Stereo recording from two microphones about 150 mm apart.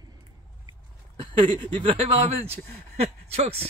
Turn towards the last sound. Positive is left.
turn(degrees=-40)  # may be behind; listen again after turning